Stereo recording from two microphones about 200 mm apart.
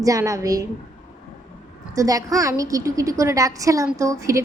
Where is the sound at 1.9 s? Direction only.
15° right (ahead or behind).